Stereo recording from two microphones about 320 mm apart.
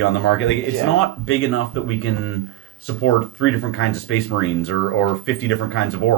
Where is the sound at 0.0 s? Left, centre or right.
Left.